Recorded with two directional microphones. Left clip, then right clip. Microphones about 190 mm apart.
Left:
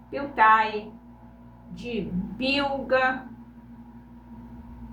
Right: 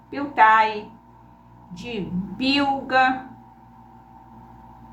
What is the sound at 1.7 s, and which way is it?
A woman's voice, 15° right (ahead or behind).